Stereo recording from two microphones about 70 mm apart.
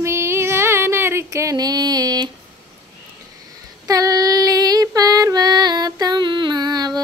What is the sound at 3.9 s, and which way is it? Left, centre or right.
Female singing, right.